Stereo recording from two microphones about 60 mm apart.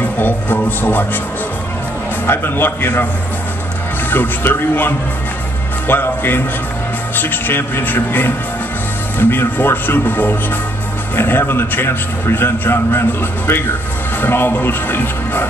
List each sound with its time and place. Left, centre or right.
0.0 s music: left
2.2 s a man's voice: left
4.1 s a man's voice: left
14.2 s a man's voice: left